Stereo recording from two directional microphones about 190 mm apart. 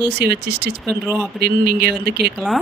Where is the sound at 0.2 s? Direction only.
55° right (ahead or behind).